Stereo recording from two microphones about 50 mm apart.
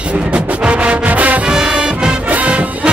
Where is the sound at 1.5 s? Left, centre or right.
Centre.